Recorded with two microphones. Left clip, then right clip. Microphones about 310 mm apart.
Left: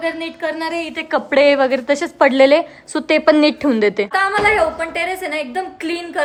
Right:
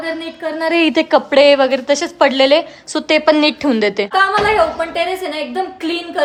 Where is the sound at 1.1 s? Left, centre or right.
Centre.